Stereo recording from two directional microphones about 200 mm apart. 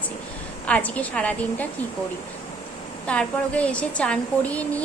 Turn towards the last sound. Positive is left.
turn(degrees=5)  # may be behind; listen again after turning